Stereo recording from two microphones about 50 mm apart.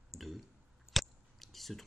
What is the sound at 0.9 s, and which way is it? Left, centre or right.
Chewing, centre.